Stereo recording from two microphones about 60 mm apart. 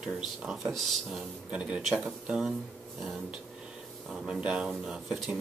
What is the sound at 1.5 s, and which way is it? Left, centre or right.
Speech, centre.